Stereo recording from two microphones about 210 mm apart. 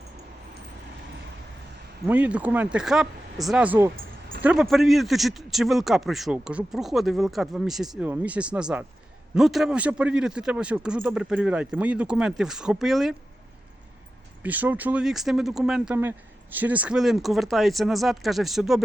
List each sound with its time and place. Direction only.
2.0 s speech: 5° right (ahead or behind)
3.9 s a sound: 45° right (ahead or behind)
4.4 s a man's voice: centre (ahead or behind)
14.4 s a man's voice: 10° right (ahead or behind)